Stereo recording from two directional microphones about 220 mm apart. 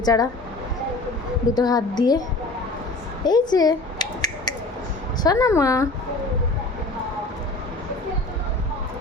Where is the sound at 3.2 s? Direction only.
20° left (ahead or behind).